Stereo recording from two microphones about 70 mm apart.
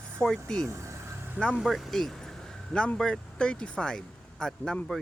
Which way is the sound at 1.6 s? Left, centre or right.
Centre.